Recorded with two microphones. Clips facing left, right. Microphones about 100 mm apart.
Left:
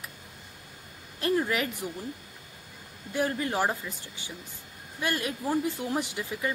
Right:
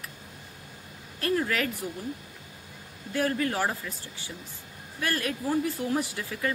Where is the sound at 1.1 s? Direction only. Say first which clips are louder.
Even; 20° left (ahead or behind).